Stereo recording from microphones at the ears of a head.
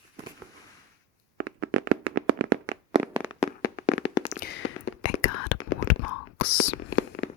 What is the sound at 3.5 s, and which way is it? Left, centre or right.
Whispering, left.